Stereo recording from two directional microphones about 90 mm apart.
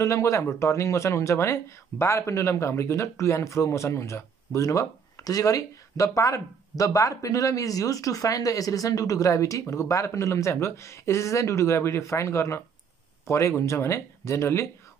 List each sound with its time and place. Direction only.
0.0 s speech: 35° left (ahead or behind)